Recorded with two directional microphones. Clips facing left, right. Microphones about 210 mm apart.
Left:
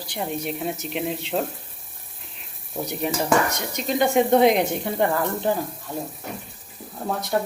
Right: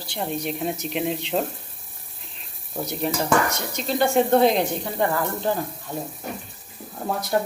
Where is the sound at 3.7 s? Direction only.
15° left (ahead or behind).